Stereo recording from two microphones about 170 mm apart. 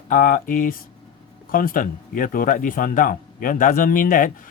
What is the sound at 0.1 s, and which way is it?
Speech, 55° left (ahead or behind).